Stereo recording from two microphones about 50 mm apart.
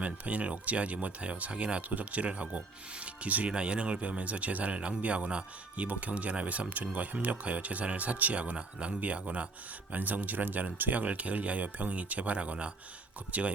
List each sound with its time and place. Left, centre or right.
0.0 s speech: right
3.5 s speech: right